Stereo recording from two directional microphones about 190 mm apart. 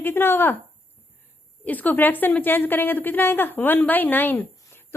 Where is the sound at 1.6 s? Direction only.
10° left (ahead or behind).